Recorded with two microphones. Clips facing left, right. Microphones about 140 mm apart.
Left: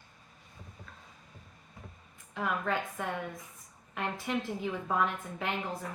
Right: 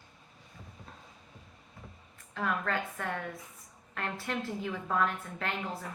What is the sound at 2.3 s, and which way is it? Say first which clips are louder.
A woman's voice: even; 10° left (ahead or behind).